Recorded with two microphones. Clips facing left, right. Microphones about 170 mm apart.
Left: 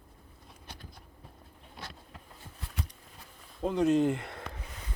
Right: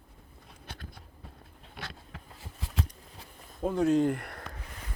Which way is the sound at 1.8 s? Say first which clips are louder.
Right 3 dB; 90° right.